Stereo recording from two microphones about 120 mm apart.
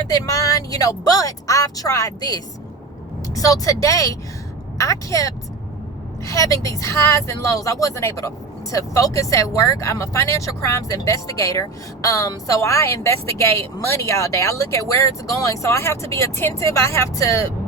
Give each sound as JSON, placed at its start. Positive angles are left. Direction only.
{"t": 0.1, "sound": "speech", "side_deg": 30}